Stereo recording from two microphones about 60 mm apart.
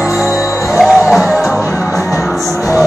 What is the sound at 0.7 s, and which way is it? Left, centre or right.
Music, centre.